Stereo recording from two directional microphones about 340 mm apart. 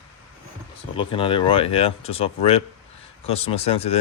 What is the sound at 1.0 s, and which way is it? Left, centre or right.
Speech, centre.